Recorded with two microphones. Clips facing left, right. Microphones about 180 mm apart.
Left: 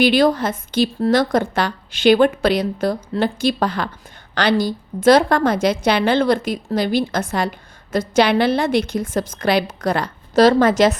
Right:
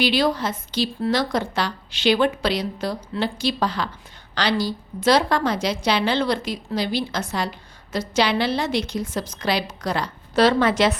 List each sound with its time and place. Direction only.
0.0 s a woman's voice: 50° left (ahead or behind)